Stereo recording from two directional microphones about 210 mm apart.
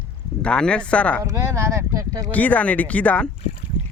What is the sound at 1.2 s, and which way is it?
Speech, 15° right (ahead or behind).